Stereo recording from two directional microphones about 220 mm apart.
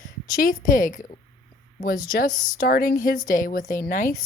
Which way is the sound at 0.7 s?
35° left (ahead or behind).